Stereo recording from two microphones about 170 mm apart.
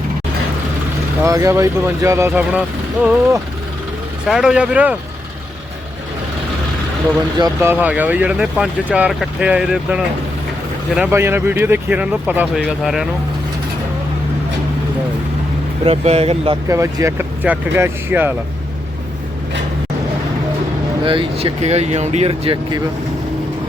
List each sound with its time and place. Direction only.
1.2 s speech: 20° right (ahead or behind)
7.3 s speech: 20° right (ahead or behind); by 13.1 s centre (ahead or behind)
15.8 s speech: 35° right (ahead or behind)
16.6 s speech: 15° right (ahead or behind)
21.0 s speech: 30° right (ahead or behind)